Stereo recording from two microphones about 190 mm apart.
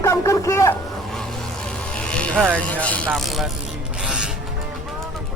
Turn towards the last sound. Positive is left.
turn(degrees=-5)  # may be behind; listen again after turning